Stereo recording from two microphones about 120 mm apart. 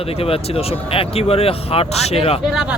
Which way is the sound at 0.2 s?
55° left (ahead or behind).